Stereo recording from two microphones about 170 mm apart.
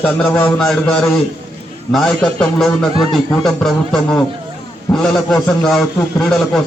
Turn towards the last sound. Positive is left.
turn(degrees=0)  # may be behind; listen again after turning